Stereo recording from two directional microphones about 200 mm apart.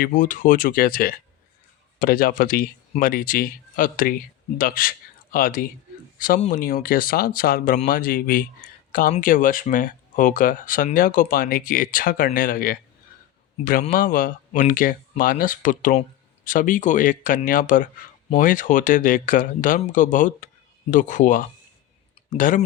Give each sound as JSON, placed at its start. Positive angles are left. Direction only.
{"t": 0.0, "sound": "speech", "side_deg": 40}
{"t": 13.8, "sound": "speech", "side_deg": 45}